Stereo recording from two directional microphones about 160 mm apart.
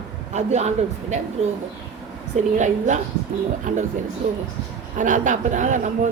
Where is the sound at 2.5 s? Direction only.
50° right (ahead or behind).